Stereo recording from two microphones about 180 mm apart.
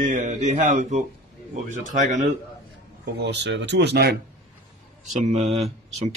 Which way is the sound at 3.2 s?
70° right (ahead or behind).